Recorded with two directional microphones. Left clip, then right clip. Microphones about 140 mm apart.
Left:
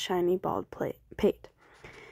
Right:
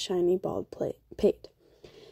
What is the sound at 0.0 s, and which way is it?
A woman's voice, 15° right (ahead or behind).